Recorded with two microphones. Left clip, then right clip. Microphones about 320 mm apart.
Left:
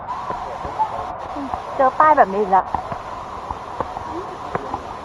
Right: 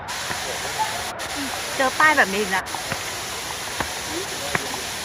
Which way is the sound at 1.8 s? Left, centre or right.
Centre.